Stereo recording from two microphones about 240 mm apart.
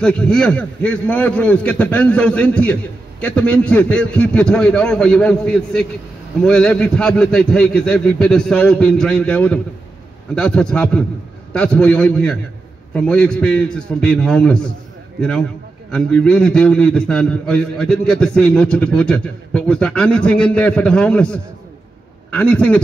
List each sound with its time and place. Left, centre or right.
0.0 s a man's voice: centre